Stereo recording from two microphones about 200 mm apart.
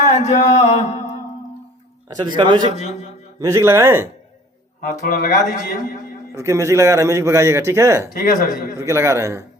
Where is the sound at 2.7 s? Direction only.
35° left (ahead or behind).